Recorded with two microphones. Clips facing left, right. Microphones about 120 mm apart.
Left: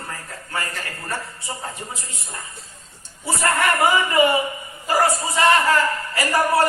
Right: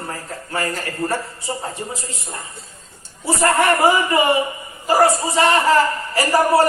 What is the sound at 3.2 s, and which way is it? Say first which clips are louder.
A man's voice: right 4 dB; 30° right (ahead or behind).